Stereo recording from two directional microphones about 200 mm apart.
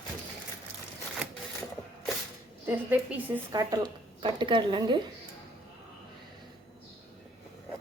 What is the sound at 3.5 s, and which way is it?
A woman's voice, 20° right (ahead or behind).